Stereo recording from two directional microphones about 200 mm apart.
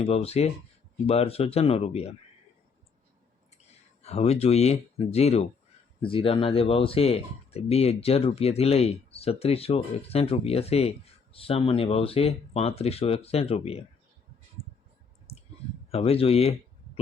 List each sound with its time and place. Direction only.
0.0 s speech: 30° left (ahead or behind)
4.0 s speech: 30° left (ahead or behind)
15.3 s clicking: 30° left (ahead or behind)
15.9 s speech: 30° left (ahead or behind)